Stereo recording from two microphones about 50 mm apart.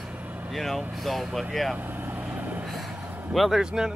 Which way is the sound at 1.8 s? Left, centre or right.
Right.